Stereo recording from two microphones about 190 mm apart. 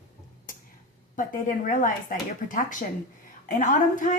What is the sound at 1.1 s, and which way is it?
A woman's voice, 45° left (ahead or behind).